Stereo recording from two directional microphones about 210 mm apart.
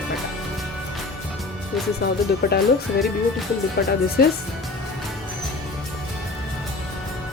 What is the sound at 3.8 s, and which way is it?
Speech, 50° left (ahead or behind).